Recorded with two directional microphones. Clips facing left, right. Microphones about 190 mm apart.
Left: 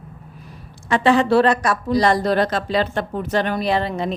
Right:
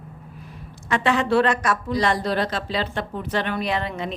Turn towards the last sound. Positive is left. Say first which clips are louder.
# left 5 dB
turn(degrees=35)  # may be behind; listen again after turning